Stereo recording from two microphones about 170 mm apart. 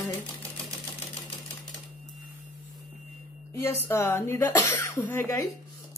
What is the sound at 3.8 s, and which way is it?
Speech, 15° left (ahead or behind).